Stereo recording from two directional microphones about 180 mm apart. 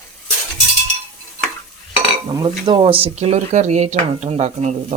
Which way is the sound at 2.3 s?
25° right (ahead or behind).